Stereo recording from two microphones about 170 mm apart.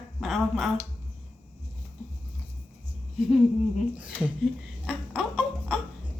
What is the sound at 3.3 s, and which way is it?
Humming, 5° right (ahead or behind).